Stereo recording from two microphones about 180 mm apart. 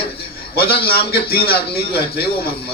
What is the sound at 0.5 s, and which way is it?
A man's voice, 60° left (ahead or behind).